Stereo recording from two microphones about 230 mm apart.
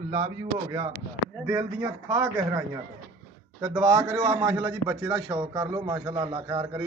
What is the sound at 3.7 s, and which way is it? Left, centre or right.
A man's voice, centre.